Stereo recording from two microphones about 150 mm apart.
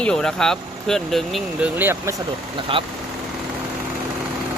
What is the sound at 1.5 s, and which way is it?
Speech, 10° right (ahead or behind).